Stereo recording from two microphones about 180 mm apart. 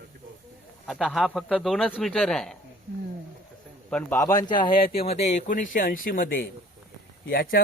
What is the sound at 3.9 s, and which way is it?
Speech, 15° left (ahead or behind).